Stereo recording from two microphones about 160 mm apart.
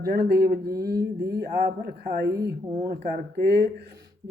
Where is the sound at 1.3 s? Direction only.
75° right (ahead or behind).